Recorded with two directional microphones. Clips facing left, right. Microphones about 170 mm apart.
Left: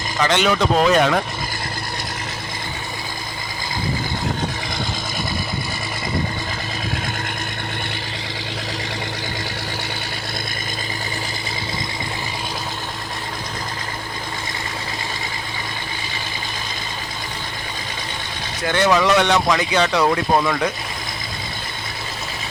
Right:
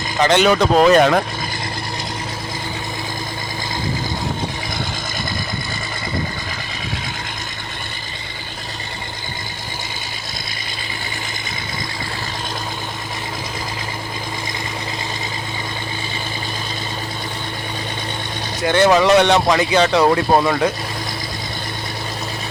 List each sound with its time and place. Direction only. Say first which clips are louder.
0.2 s speech: right 4 dB; 35° right (ahead or behind)
18.6 s speech: right 4 dB; 30° right (ahead or behind)